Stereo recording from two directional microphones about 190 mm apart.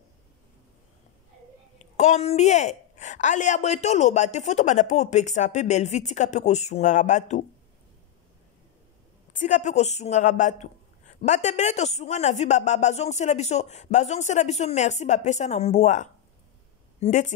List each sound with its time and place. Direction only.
1.8 s a woman's voice: 35° left (ahead or behind)
9.3 s a woman's voice: 40° left (ahead or behind)